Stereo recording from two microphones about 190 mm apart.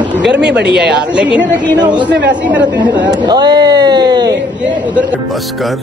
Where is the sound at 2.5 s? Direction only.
5° right (ahead or behind).